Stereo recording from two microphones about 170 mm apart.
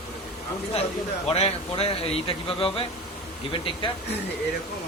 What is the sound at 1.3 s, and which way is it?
Speech, 35° left (ahead or behind).